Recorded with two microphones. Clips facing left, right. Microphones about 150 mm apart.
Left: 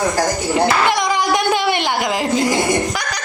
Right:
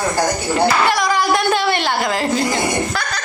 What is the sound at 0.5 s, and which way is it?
Speech, 20° left (ahead or behind).